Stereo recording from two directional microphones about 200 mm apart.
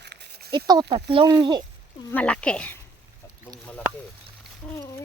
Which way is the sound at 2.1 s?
5° left (ahead or behind).